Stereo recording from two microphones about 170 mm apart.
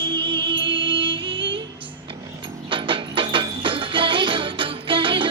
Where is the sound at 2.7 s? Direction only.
30° right (ahead or behind).